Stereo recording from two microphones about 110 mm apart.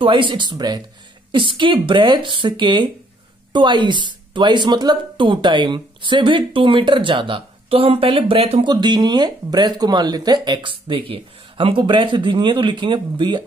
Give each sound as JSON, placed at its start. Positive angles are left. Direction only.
{"t": 0.0, "sound": "speech", "side_deg": -50}
{"t": 8.6, "sound": "speech", "side_deg": -40}